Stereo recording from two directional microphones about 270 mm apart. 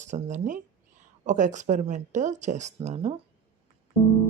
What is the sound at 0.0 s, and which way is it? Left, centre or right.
Speech, right.